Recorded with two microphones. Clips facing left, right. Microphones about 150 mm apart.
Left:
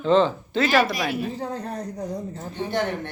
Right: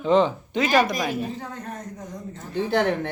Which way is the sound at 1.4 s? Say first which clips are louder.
Left 5 dB; 35° left (ahead or behind).